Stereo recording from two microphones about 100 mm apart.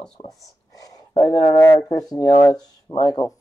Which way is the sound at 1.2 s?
40° left (ahead or behind).